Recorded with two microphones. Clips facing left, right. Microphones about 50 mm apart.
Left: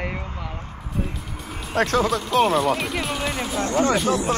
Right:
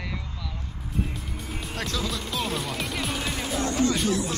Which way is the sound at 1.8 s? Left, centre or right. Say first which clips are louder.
Left 11 dB; left.